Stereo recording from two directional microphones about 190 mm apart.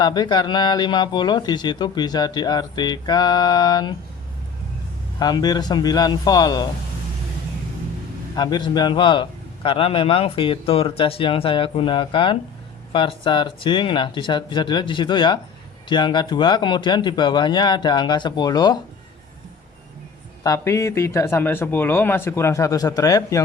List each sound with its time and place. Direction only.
0.0 s speech: 20° left (ahead or behind)
5.2 s speech: 20° left (ahead or behind)
8.4 s speech: 25° left (ahead or behind)
20.4 s speech: 15° left (ahead or behind)